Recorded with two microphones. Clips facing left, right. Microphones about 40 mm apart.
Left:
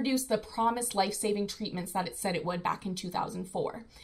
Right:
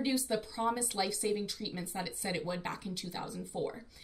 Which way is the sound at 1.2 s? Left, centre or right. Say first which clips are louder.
Left 3 dB; centre.